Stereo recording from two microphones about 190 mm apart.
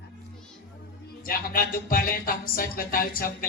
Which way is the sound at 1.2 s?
50° left (ahead or behind).